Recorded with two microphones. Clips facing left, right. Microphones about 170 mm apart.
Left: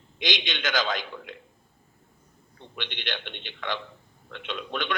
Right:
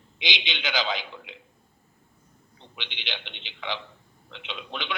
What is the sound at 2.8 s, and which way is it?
Speech, 50° left (ahead or behind).